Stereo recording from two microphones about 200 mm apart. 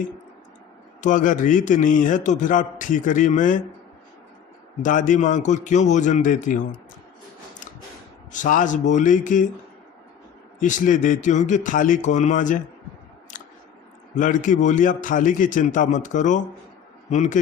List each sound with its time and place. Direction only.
1.0 s a man's voice: 40° left (ahead or behind)
4.8 s a man's voice: 40° left (ahead or behind)
8.3 s a man's voice: 40° left (ahead or behind)
10.6 s a man's voice: 40° left (ahead or behind)
13.3 s scissors: 40° left (ahead or behind)
14.2 s a man's voice: 40° left (ahead or behind)